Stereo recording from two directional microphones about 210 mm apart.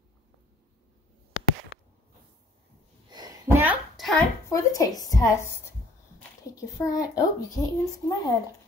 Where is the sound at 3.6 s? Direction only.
5° right (ahead or behind).